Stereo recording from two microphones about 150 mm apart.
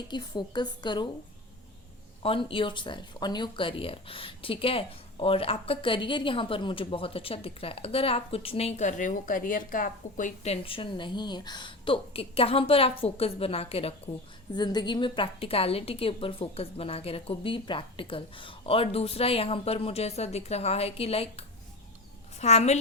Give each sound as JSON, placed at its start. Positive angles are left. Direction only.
{"t": 0.1, "sound": "a woman's voice", "side_deg": 30}
{"t": 2.2, "sound": "speech", "side_deg": 35}
{"t": 14.5, "sound": "a woman's voice", "side_deg": 30}